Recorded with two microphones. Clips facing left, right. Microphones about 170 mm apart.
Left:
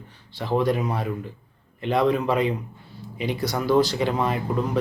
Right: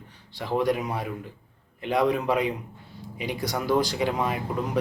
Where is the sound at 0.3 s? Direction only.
15° right (ahead or behind).